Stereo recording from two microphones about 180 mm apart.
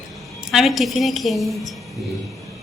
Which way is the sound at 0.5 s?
Centre (ahead or behind).